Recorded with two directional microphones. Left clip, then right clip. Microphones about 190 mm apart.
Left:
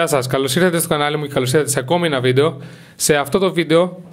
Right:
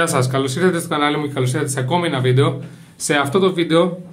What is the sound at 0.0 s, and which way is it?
Speech, 45° left (ahead or behind).